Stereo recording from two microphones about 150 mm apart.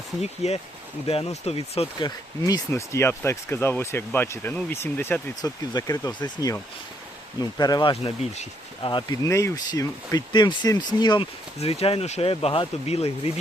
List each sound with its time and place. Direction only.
0.2 s speech: 45° left (ahead or behind)
2.0 s speech: 25° left (ahead or behind); by 13.3 s 40° left (ahead or behind)